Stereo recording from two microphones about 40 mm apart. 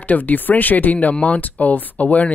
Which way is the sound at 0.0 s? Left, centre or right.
Left.